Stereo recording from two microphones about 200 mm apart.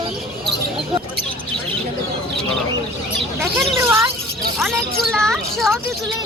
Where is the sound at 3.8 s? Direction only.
15° right (ahead or behind).